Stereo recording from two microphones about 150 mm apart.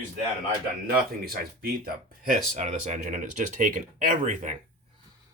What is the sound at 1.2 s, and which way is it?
Speech, 85° right.